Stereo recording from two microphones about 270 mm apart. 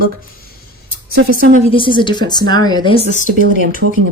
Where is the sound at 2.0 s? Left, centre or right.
Centre.